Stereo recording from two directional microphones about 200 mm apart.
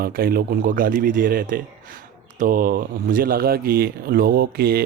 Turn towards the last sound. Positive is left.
turn(degrees=-50)  # may be behind; listen again after turning